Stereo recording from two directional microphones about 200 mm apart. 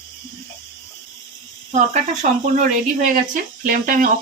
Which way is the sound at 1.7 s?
35° right (ahead or behind).